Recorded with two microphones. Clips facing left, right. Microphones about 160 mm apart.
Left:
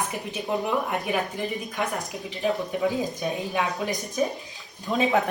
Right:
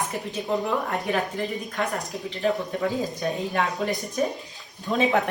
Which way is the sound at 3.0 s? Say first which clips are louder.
Right 1 dB; centre (ahead or behind).